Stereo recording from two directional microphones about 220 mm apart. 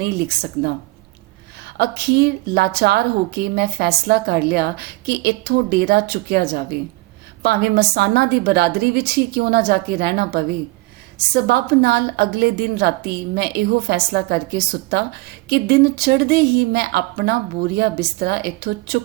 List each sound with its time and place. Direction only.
0.0 s a woman's voice: 45° right (ahead or behind)
1.8 s a woman's voice: 45° right (ahead or behind)